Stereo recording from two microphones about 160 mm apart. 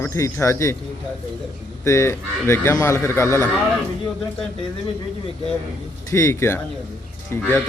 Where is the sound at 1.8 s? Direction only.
15° left (ahead or behind).